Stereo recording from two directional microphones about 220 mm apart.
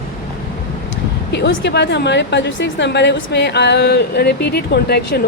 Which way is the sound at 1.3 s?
50° left (ahead or behind).